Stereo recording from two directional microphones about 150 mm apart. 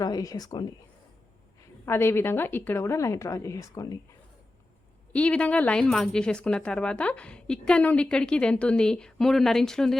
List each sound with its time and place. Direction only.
0.0 s speech: 25° left (ahead or behind)
1.8 s a woman's voice: 15° left (ahead or behind)
5.1 s speech: 10° left (ahead or behind)